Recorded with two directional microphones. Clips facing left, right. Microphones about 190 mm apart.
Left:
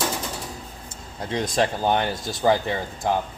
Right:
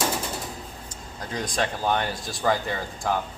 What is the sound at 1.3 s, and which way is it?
Speech, 25° left (ahead or behind).